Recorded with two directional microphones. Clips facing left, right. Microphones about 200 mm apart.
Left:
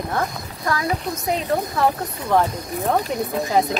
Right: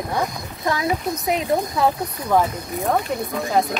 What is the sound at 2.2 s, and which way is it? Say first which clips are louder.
Speech: even; 5° right (ahead or behind).